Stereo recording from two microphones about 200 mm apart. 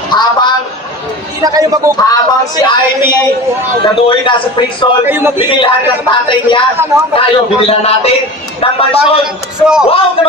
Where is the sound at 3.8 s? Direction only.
25° left (ahead or behind).